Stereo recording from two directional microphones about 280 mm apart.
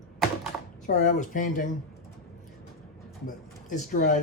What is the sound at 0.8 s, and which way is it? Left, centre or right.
Speech, left.